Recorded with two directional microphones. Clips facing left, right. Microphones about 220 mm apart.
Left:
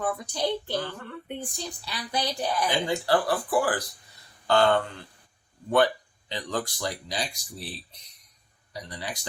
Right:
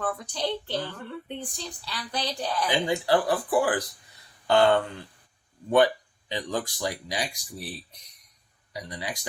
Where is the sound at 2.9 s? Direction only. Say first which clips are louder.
Right 2 dB; 15° right (ahead or behind).